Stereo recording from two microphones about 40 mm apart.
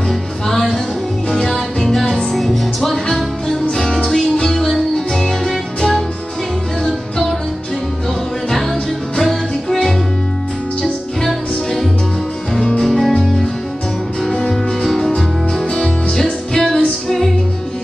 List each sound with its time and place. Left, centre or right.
0.1 s music: centre
9.2 s music: centre
11.2 s music: centre
12.5 s music: centre
14.2 s music: centre